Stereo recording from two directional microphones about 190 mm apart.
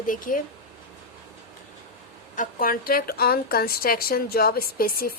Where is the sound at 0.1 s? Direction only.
45° left (ahead or behind).